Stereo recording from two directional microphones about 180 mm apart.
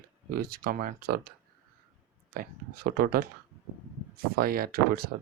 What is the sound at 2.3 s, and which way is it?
Speech, 55° right (ahead or behind).